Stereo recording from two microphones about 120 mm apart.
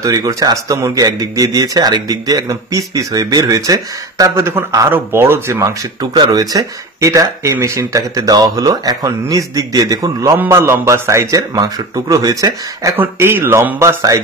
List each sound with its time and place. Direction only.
0.0 s speech: 30° right (ahead or behind)
6.1 s speech: 35° right (ahead or behind)
12.9 s speech: 20° right (ahead or behind)